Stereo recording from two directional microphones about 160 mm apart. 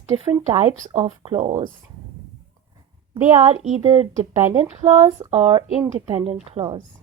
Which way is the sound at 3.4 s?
40° right (ahead or behind).